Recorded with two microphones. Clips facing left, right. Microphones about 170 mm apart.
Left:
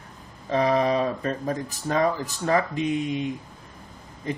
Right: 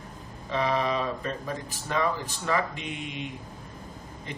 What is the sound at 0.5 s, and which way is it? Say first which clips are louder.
Speech: left 5 dB; 40° left (ahead or behind).